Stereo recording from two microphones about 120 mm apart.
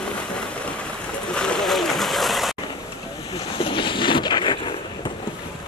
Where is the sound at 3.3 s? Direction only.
45° left (ahead or behind).